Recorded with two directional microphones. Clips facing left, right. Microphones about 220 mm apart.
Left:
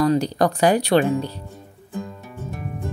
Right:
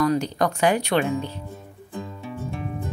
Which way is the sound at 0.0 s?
35° left (ahead or behind).